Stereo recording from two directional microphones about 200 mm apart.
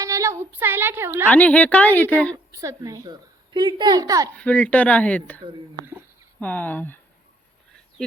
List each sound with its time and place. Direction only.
0.0 s a sound: 15° right (ahead or behind)
1.3 s speech: 5° left (ahead or behind)
2.5 s a woman's voice: 15° right (ahead or behind)
4.4 s speech: 5° left (ahead or behind)
6.4 s speech: 5° left (ahead or behind)